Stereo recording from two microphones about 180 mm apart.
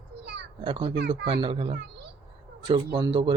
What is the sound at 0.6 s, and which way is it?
Speech, 30° right (ahead or behind).